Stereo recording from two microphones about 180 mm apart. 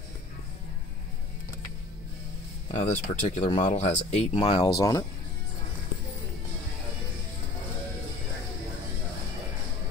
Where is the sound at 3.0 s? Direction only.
40° left (ahead or behind); by 5.0 s 20° left (ahead or behind).